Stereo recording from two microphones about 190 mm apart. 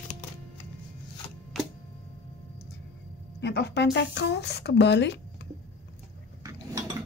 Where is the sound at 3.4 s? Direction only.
65° left (ahead or behind).